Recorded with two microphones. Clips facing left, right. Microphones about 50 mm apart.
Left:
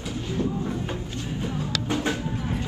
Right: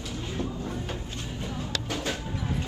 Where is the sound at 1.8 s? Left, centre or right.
Left.